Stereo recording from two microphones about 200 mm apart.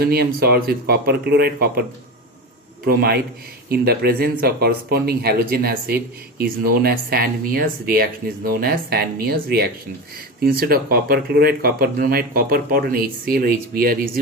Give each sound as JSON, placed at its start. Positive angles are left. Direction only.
{"t": 0.0, "sound": "speech", "side_deg": -50}
{"t": 2.8, "sound": "speech", "side_deg": -50}